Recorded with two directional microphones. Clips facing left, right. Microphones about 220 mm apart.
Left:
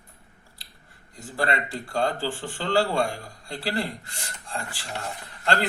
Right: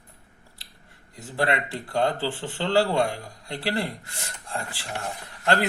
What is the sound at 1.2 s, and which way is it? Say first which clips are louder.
Speech: right 2 dB; 20° right (ahead or behind).